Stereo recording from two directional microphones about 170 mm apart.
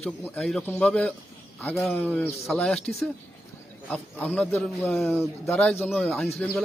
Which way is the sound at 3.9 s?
10° left (ahead or behind).